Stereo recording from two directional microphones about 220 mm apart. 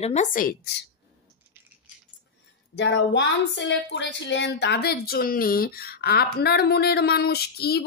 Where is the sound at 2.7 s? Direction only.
50° left (ahead or behind).